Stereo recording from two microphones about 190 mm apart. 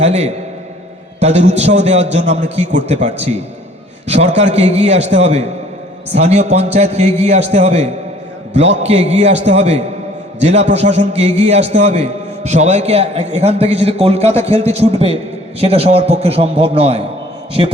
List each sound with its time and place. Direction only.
0.0 s a man's voice: 35° right (ahead or behind)
4.4 s a man's voice: 35° right (ahead or behind)